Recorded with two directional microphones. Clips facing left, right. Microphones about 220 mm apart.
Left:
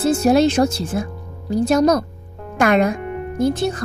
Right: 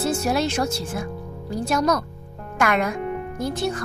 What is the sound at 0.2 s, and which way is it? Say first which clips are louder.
Speech: left 8 dB; 25° left (ahead or behind).